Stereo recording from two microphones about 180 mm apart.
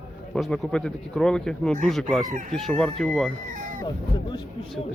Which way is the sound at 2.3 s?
45° right (ahead or behind).